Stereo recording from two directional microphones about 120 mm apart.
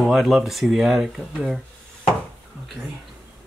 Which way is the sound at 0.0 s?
Centre (ahead or behind).